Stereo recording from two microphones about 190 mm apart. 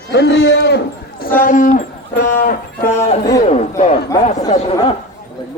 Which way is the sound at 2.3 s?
45° left (ahead or behind).